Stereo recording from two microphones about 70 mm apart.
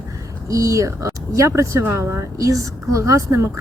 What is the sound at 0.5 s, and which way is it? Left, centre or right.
Speech, right.